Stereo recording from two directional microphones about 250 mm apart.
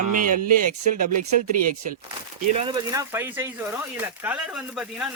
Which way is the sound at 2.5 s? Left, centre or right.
Centre.